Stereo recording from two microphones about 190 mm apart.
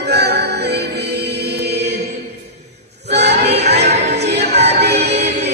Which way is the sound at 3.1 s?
60° right (ahead or behind).